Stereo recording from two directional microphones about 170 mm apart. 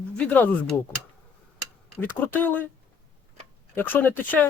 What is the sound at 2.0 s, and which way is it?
Speech, 10° left (ahead or behind).